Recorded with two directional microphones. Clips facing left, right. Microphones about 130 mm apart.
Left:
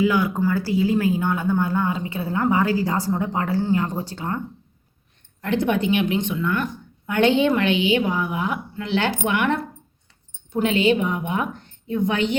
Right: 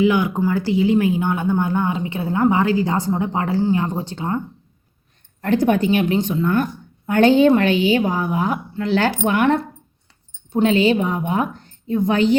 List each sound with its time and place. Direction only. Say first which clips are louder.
0.0 s speech: right 3 dB; 20° right (ahead or behind)
5.4 s a woman's voice: right 4 dB; 40° right (ahead or behind)